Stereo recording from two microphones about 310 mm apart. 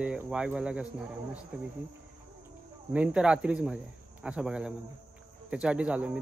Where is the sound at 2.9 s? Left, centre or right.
Centre.